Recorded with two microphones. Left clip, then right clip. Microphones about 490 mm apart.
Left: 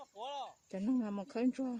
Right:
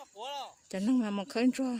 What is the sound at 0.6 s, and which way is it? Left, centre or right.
A woman's voice, left.